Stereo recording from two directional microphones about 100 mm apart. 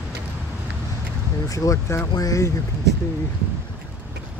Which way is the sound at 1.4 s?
35° left (ahead or behind).